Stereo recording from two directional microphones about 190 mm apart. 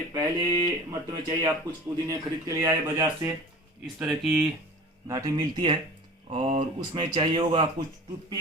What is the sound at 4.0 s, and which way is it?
Speech, 5° right (ahead or behind).